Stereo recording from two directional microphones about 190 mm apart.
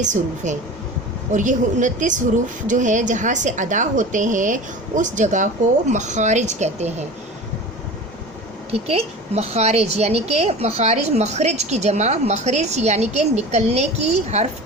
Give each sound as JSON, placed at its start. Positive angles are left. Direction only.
{"t": 0.0, "sound": "a woman's voice", "side_deg": -40}
{"t": 8.7, "sound": "a woman's voice", "side_deg": -30}